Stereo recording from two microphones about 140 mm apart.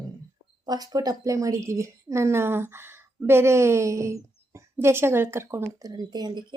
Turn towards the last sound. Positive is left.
turn(degrees=-30)  # may be behind; listen again after turning